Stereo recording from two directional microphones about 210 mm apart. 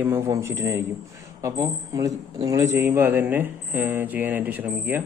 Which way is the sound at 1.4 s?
15° right (ahead or behind).